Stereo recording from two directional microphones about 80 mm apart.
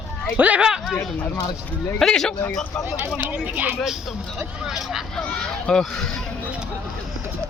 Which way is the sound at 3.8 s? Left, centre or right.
Centre.